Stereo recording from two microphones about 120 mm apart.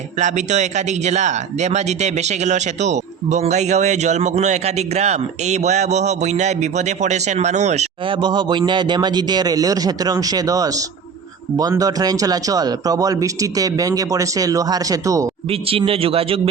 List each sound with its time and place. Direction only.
0.2 s speech: 85° right
8.0 s a man's voice: 45° right (ahead or behind); by 15.3 s 30° right (ahead or behind)
15.4 s a man's voice: 50° right (ahead or behind)